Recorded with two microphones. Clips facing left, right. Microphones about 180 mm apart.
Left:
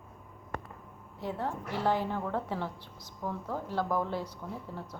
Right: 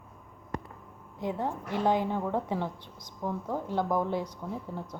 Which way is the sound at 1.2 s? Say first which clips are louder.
Right 3 dB; 15° right (ahead or behind).